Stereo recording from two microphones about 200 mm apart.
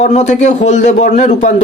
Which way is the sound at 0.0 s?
35° left (ahead or behind).